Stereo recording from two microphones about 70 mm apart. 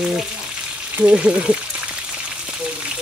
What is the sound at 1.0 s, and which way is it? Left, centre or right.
Speech, centre.